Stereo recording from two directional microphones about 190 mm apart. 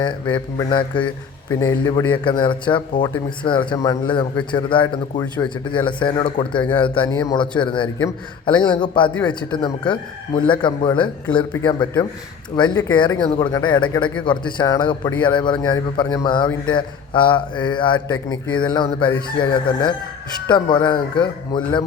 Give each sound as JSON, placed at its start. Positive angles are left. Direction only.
{"t": 0.3, "sound": "speech", "side_deg": 25}